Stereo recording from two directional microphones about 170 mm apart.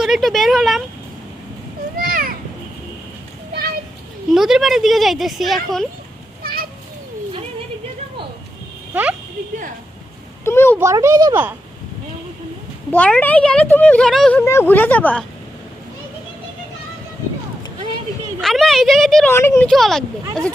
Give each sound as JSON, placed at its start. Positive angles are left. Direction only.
{"t": 0.0, "sound": "speech", "side_deg": 0}
{"t": 2.0, "sound": "a sound", "side_deg": -55}
{"t": 3.5, "sound": "children playing", "side_deg": -65}
{"t": 4.3, "sound": "speech", "side_deg": 0}
{"t": 6.4, "sound": "children playing", "side_deg": -60}
{"t": 8.9, "sound": "speech", "side_deg": -10}
{"t": 10.4, "sound": "a child's voice", "side_deg": 15}
{"t": 10.8, "sound": "speech", "side_deg": -15}
{"t": 12.9, "sound": "speech", "side_deg": 10}
{"t": 14.4, "sound": "speech", "side_deg": 15}
{"t": 18.3, "sound": "speech", "side_deg": 0}
{"t": 19.3, "sound": "speech", "side_deg": 15}
{"t": 19.7, "sound": "speech", "side_deg": 0}